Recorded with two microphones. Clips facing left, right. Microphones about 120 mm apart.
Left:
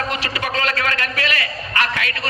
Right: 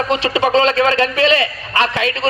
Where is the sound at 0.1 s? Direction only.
25° right (ahead or behind).